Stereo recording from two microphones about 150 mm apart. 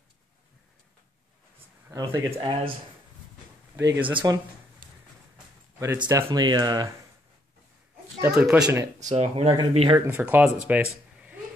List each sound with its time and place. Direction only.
1.9 s speech: 15° right (ahead or behind)
2.3 s speech: 40° right (ahead or behind)
3.7 s speech: 15° right (ahead or behind)
5.9 s speech: 25° right (ahead or behind)
8.2 s speech: 5° right (ahead or behind)
8.6 s speech: 25° right (ahead or behind)
9.1 s speech: 45° right (ahead or behind)
10.0 s speech: 15° right (ahead or behind)